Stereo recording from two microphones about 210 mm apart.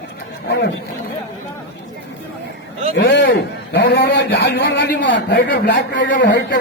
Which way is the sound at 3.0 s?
50° left (ahead or behind).